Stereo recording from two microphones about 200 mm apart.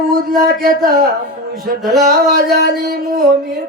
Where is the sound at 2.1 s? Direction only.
45° right (ahead or behind).